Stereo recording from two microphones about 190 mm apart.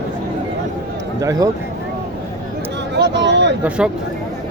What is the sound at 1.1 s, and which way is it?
Speech, 15° right (ahead or behind).